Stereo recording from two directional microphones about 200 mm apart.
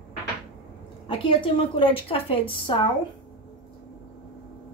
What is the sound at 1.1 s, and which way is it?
A woman's voice, 25° left (ahead or behind).